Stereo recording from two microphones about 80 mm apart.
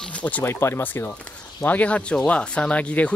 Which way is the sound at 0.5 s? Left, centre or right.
Left.